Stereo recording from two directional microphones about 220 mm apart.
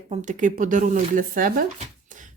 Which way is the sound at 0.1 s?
35° right (ahead or behind).